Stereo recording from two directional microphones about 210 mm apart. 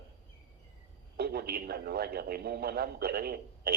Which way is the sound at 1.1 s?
45° right (ahead or behind).